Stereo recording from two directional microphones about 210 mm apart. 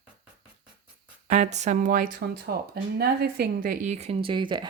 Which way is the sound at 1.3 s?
35° right (ahead or behind).